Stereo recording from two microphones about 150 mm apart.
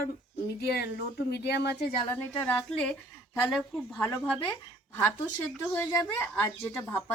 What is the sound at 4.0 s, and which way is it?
Speech, 20° left (ahead or behind).